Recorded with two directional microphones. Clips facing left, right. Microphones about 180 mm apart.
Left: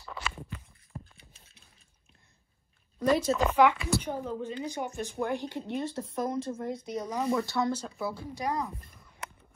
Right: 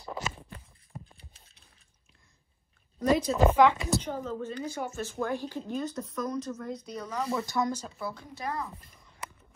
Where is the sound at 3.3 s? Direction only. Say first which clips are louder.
Right 5 dB; 15° right (ahead or behind).